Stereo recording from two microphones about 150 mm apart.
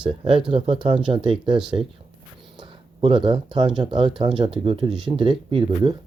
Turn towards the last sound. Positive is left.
turn(degrees=-35)  # may be behind; listen again after turning